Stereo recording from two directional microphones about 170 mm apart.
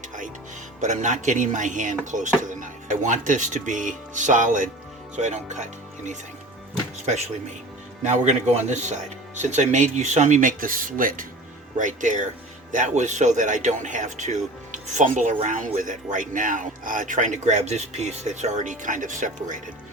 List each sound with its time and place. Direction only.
0.8 s speech: 45° right (ahead or behind)
7.0 s speech: 40° right (ahead or behind)